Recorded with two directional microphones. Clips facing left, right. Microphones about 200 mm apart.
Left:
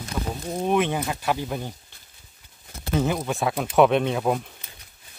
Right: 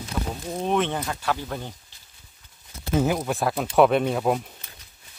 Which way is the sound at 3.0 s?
5° right (ahead or behind).